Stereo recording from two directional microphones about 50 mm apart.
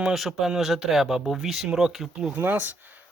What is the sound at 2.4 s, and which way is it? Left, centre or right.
Speech, right.